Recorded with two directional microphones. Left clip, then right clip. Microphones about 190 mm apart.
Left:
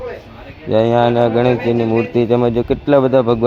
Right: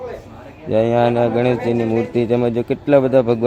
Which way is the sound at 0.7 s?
Centre (ahead or behind).